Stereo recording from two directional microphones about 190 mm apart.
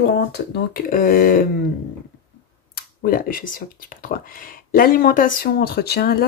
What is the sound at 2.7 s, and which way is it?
Speech, 50° left (ahead or behind).